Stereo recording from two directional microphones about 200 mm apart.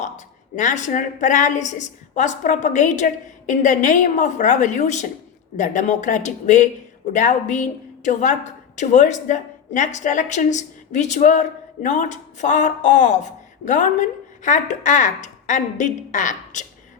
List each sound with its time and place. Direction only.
0.5 s speech: 40° left (ahead or behind)